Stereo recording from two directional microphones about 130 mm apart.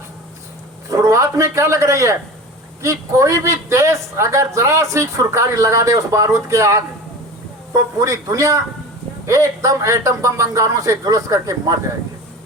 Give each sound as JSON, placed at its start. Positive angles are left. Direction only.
{"t": 0.9, "sound": "speech", "side_deg": -25}
{"t": 7.9, "sound": "speech", "side_deg": -25}